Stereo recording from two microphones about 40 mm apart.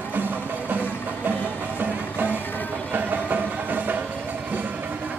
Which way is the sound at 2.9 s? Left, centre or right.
Right.